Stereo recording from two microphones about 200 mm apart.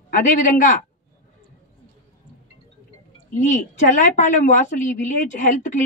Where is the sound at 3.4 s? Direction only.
40° left (ahead or behind).